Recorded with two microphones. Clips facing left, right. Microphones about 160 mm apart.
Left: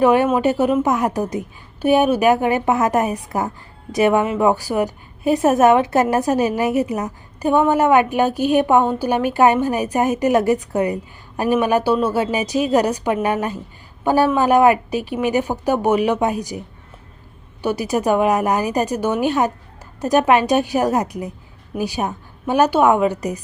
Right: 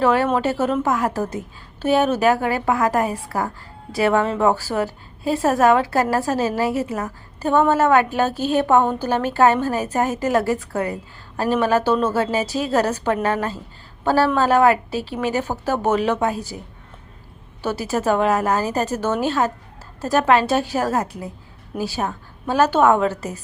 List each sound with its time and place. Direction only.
0.0 s a woman's voice: 15° left (ahead or behind)
17.6 s a woman's voice: 15° left (ahead or behind)